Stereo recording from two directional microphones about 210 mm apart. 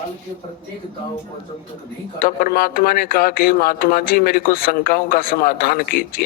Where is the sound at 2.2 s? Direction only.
45° left (ahead or behind).